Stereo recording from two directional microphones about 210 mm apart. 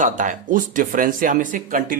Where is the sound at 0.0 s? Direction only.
40° right (ahead or behind).